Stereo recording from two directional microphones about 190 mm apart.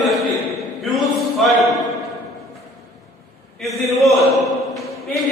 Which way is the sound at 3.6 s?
Centre (ahead or behind).